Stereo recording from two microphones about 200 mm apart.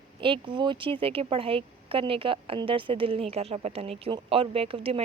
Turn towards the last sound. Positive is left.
turn(degrees=-30)  # may be behind; listen again after turning